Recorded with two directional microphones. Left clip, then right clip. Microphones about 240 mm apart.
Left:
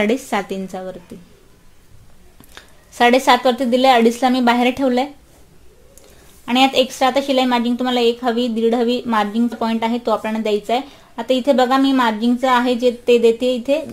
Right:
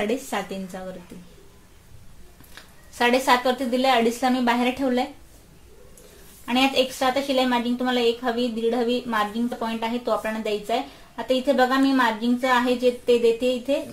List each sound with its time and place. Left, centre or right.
0.0 s a woman's voice: left
2.5 s a woman's voice: left
6.4 s a woman's voice: left